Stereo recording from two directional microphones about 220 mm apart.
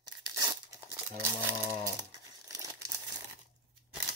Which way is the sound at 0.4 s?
15° right (ahead or behind).